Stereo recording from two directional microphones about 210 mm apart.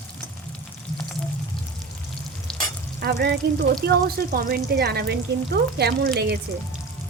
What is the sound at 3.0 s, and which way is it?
Speech, 50° right (ahead or behind).